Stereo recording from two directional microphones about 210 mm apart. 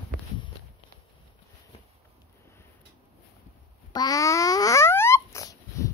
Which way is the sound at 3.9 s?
20° left (ahead or behind).